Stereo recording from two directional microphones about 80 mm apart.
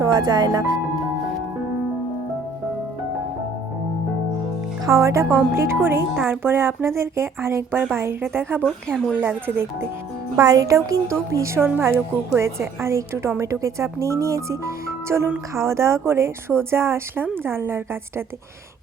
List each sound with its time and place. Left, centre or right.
0.0 s speech: right
4.9 s a woman's voice: right
8.6 s speech: centre
9.1 s speech: right
10.3 s a woman's voice: right
11.7 s a woman's voice: right